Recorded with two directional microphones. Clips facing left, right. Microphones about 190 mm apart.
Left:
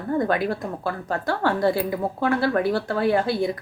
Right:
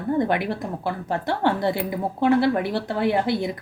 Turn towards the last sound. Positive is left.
turn(degrees=-20)  # may be behind; listen again after turning